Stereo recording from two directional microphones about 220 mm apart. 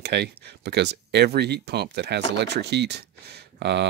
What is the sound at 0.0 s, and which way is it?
Speech, 50° right (ahead or behind).